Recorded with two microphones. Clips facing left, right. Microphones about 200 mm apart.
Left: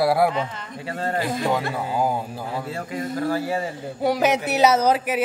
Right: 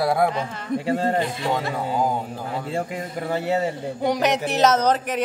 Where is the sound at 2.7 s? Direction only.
25° right (ahead or behind).